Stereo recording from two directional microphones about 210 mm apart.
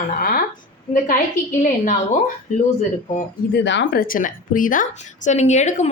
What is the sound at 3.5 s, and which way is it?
A woman's voice, 55° left (ahead or behind).